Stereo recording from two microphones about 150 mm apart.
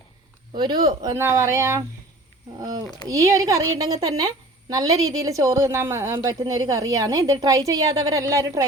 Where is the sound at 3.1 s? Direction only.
20° right (ahead or behind).